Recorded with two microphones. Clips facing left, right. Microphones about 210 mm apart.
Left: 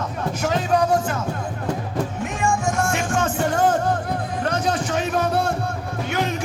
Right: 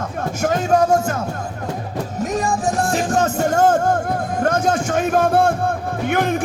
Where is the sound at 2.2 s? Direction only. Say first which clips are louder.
Right 5 dB; 40° right (ahead or behind).